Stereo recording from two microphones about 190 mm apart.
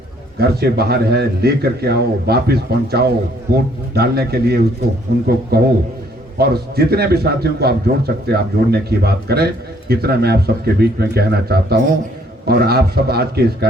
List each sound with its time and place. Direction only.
0.3 s a man's voice: 55° right (ahead or behind)